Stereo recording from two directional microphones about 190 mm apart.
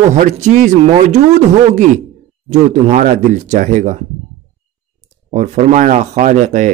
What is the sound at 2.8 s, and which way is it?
Speech, 40° right (ahead or behind).